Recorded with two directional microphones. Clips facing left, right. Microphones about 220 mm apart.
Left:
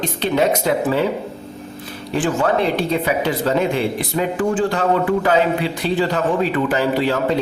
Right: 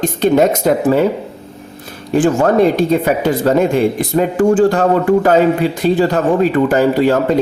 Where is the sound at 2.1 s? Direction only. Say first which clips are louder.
Right 7 dB; 45° right (ahead or behind).